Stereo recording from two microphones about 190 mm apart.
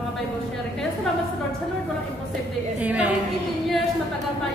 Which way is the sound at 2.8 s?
5° right (ahead or behind).